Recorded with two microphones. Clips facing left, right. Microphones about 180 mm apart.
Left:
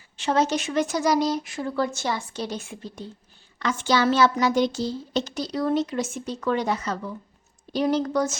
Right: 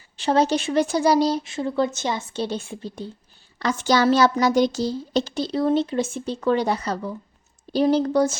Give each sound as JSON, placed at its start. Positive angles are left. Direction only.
{"t": 0.2, "sound": "speech", "side_deg": -35}